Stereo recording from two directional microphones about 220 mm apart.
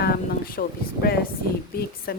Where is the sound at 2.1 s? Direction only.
45° left (ahead or behind).